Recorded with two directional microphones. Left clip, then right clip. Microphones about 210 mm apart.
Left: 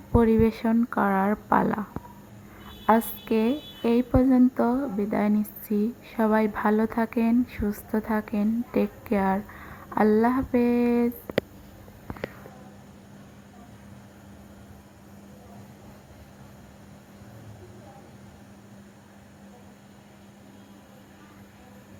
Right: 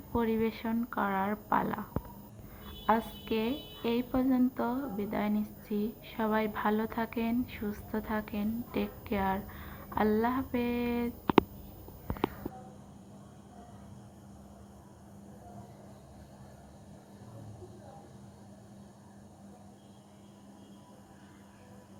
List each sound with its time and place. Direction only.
0.1 s a woman's voice: 60° left (ahead or behind)